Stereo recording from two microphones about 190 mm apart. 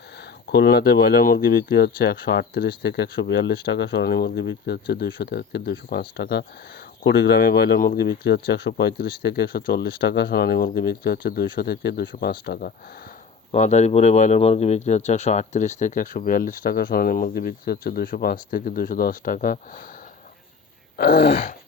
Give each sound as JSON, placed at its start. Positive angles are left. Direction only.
{"t": 0.5, "sound": "speech", "side_deg": 60}
{"t": 13.5, "sound": "speech", "side_deg": 35}
{"t": 20.9, "sound": "speech", "side_deg": 55}